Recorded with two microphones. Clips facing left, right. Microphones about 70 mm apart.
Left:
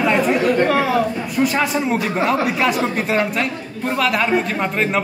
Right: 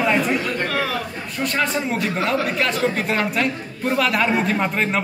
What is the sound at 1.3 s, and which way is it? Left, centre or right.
A man's voice, centre.